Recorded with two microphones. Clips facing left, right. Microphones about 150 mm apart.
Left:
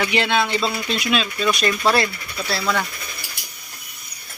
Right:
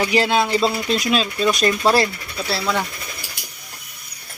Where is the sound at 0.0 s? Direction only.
35° right (ahead or behind).